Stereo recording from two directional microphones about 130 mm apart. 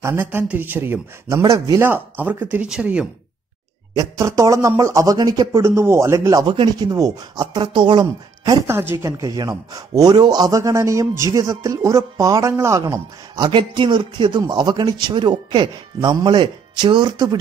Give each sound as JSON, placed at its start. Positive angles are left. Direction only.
{"t": 0.0, "sound": "speech", "side_deg": -20}
{"t": 3.9, "sound": "speech", "side_deg": -25}
{"t": 6.4, "sound": "a man's voice", "side_deg": -35}
{"t": 8.6, "sound": "a man's voice", "side_deg": -20}